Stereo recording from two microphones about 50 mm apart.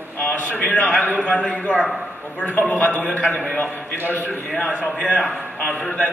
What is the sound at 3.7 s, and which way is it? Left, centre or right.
Speech, right.